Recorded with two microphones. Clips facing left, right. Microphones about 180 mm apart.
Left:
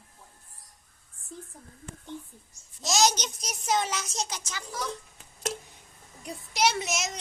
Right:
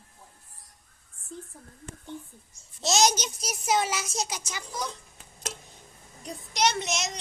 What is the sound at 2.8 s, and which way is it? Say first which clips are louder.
Speech: right 1 dB; 25° right (ahead or behind).